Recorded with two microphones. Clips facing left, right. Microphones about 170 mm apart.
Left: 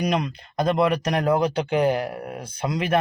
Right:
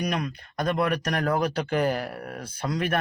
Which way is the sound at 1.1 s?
20° left (ahead or behind).